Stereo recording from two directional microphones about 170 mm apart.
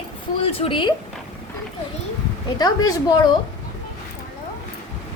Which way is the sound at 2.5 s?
25° left (ahead or behind).